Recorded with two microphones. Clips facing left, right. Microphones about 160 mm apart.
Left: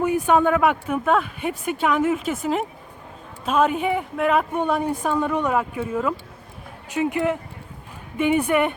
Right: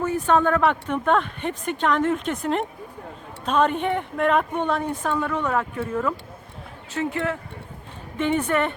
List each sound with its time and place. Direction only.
0.0 s speech: 10° left (ahead or behind)